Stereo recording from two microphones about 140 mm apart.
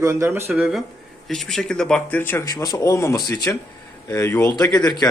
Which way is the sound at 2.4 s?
25° left (ahead or behind).